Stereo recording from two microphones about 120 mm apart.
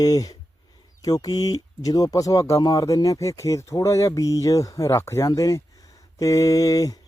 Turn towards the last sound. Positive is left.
turn(degrees=30)  # may be behind; listen again after turning